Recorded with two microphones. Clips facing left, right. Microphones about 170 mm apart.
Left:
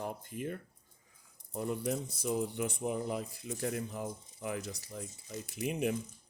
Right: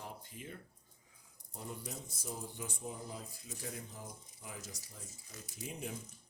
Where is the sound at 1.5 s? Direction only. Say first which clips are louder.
Left 12 dB; 65° left (ahead or behind).